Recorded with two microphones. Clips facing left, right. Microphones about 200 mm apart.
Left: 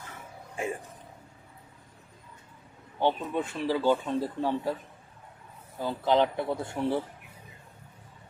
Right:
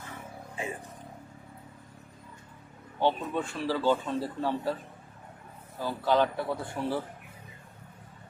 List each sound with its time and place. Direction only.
3.0 s a man's voice: 15° left (ahead or behind)
5.8 s speech: 20° left (ahead or behind)